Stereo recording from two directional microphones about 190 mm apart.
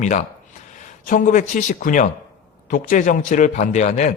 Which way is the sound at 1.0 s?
45° left (ahead or behind).